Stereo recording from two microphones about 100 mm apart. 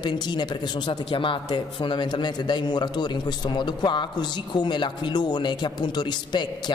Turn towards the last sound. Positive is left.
turn(degrees=50)  # may be behind; listen again after turning